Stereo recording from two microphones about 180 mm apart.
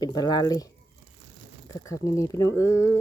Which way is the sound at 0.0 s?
20° left (ahead or behind).